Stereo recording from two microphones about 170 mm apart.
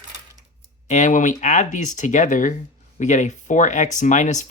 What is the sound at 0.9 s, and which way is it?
Speech, 45° left (ahead or behind).